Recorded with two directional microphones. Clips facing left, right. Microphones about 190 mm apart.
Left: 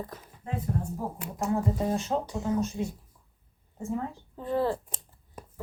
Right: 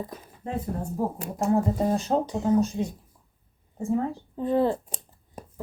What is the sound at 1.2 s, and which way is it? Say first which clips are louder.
Speech: right 4 dB; 35° right (ahead or behind).